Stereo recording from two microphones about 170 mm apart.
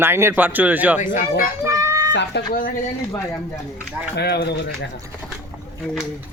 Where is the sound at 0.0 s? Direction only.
15° right (ahead or behind).